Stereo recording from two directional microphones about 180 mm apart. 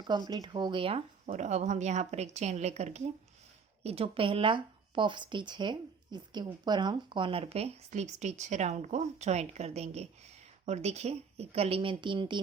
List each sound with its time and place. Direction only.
0.0 s a woman's voice: 25° right (ahead or behind)